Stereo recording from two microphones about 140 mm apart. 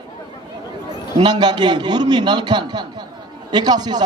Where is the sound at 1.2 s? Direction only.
30° right (ahead or behind).